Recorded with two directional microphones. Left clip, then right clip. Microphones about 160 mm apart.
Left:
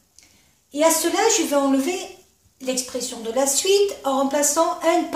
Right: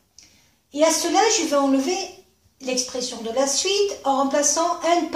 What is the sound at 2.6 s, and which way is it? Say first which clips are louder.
A woman's voice: right 1 dB; 25° left (ahead or behind).